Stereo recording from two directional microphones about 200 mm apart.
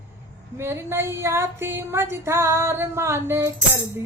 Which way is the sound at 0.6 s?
10° right (ahead or behind).